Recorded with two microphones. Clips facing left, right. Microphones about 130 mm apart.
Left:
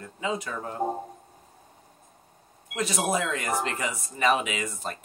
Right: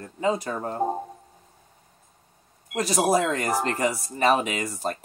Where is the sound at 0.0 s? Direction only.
40° right (ahead or behind).